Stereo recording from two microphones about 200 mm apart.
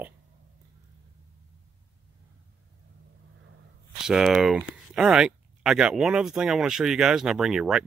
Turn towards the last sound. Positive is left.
turn(degrees=0)  # may be behind; listen again after turning